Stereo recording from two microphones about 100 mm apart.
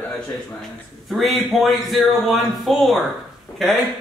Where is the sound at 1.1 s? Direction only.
Centre (ahead or behind).